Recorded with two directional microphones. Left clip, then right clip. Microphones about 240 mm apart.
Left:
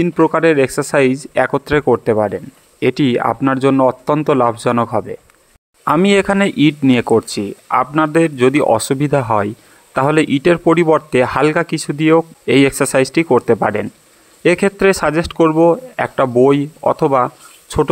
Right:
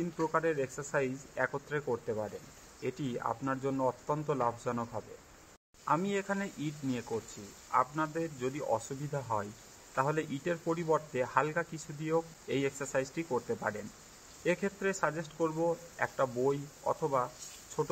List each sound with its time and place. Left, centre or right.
0.0 s speech: left